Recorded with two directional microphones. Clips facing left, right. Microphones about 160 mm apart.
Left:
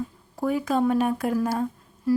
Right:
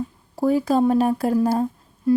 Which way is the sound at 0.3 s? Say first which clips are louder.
Right 5 dB; 35° right (ahead or behind).